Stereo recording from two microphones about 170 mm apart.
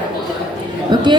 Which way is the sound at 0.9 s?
25° right (ahead or behind).